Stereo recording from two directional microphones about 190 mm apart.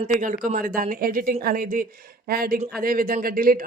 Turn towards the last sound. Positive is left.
turn(degrees=-50)  # may be behind; listen again after turning